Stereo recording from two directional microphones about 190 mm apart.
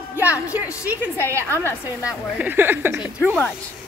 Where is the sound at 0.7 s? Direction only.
15° left (ahead or behind).